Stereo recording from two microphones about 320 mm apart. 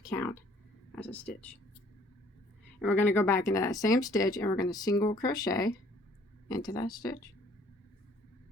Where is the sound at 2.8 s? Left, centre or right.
Centre.